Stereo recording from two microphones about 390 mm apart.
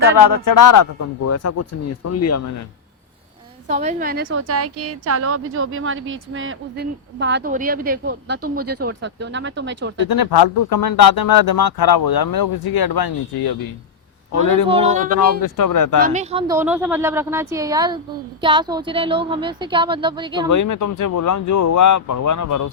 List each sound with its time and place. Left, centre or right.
0.2 s a man's voice: left
3.7 s a woman's voice: centre
10.1 s speech: left
14.3 s speech: left
14.7 s a woman's voice: centre
15.1 s speech: left
16.0 s a woman's voice: centre
20.5 s speech: left